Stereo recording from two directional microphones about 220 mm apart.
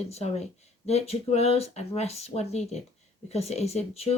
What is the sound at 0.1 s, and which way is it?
Speech, 30° left (ahead or behind).